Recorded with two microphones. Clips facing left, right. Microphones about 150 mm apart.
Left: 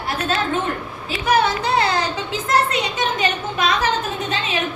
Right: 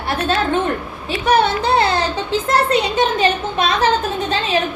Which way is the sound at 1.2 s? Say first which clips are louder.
Right 3 dB; 30° right (ahead or behind).